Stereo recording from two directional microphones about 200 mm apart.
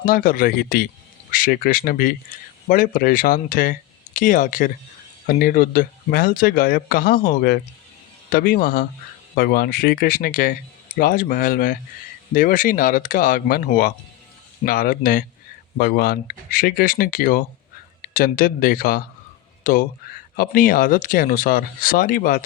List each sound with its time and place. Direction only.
0.0 s speech: 45° left (ahead or behind)